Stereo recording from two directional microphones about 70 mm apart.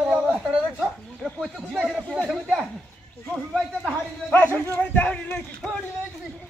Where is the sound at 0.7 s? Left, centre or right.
Centre.